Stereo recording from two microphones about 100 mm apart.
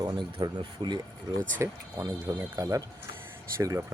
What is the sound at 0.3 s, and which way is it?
Speech, 40° right (ahead or behind).